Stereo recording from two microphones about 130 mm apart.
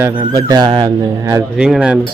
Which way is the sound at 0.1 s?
35° right (ahead or behind).